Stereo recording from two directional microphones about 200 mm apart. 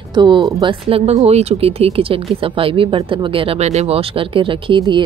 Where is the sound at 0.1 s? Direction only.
20° right (ahead or behind).